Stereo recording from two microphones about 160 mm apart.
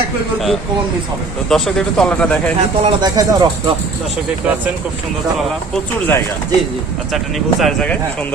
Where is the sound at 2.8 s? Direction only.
30° right (ahead or behind).